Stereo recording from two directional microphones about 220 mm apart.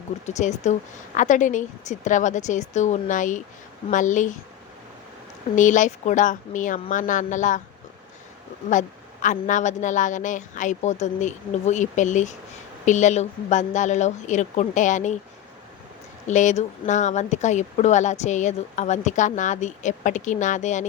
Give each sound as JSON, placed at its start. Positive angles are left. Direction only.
{"t": 0.3, "sound": "speech", "side_deg": 30}
{"t": 5.5, "sound": "speech", "side_deg": 35}
{"t": 9.2, "sound": "speech", "side_deg": 35}
{"t": 16.2, "sound": "speech", "side_deg": 35}